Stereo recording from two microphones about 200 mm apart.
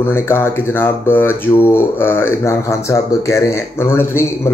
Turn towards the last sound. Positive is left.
turn(degrees=10)  # may be behind; listen again after turning